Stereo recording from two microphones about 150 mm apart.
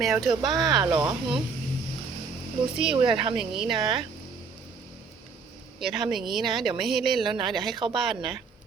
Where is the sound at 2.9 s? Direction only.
35° right (ahead or behind).